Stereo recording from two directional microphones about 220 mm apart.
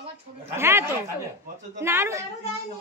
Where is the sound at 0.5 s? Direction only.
10° right (ahead or behind).